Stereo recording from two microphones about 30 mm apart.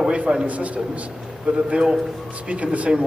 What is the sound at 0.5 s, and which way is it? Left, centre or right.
Speech, right.